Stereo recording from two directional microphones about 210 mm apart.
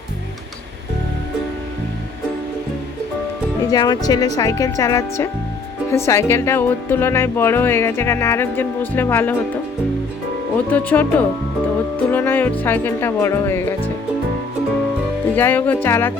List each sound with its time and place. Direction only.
3.7 s speech: 20° left (ahead or behind)
10.7 s speech: 5° left (ahead or behind)
15.4 s speech: 10° left (ahead or behind)